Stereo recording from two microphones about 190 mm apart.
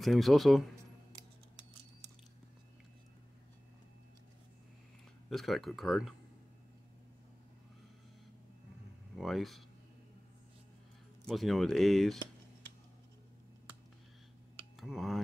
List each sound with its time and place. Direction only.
0.0 s speech: centre (ahead or behind)
5.3 s speech: centre (ahead or behind)
9.1 s speech: centre (ahead or behind)
11.2 s speech: centre (ahead or behind)
14.8 s speech: centre (ahead or behind)